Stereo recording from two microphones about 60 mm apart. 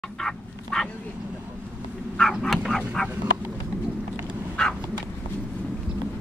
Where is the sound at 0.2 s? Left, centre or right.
Centre.